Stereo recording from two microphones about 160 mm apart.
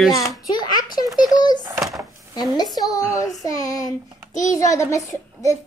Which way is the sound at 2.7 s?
25° left (ahead or behind).